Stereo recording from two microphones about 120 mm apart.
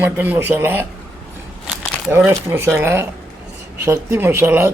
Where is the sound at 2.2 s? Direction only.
20° right (ahead or behind).